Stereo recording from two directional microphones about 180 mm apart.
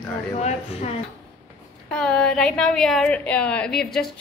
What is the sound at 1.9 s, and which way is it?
A woman's voice, 5° left (ahead or behind).